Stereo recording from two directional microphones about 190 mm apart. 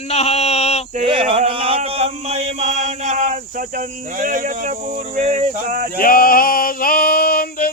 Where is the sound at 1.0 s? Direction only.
30° right (ahead or behind); by 6.0 s 50° right (ahead or behind).